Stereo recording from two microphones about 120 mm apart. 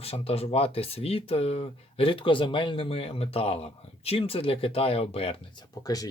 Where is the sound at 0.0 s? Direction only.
55° left (ahead or behind).